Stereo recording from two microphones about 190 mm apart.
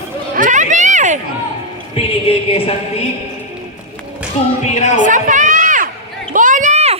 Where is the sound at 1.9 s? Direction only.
30° left (ahead or behind).